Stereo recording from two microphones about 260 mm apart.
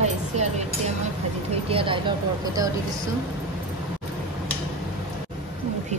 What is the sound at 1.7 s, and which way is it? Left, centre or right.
Speech, centre.